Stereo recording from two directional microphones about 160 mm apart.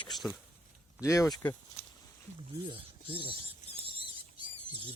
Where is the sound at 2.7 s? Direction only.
35° right (ahead or behind).